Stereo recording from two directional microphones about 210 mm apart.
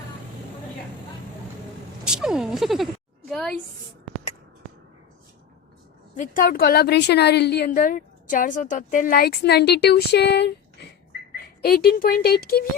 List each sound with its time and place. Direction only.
2.0 s sheep: 5° right (ahead or behind)
6.1 s a woman's voice: 40° left (ahead or behind)
11.6 s a woman's voice: 45° left (ahead or behind)